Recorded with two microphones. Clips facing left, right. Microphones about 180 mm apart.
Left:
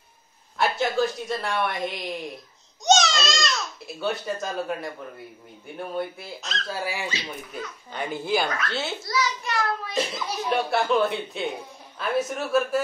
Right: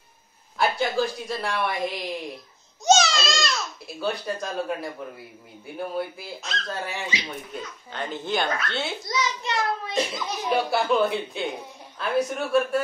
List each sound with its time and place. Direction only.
0.6 s a child's voice: centre (ahead or behind)
9.0 s a child's voice: 20° right (ahead or behind)
9.9 s a child's voice: 5° left (ahead or behind)